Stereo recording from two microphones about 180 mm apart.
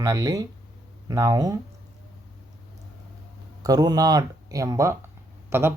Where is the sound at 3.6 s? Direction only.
20° right (ahead or behind).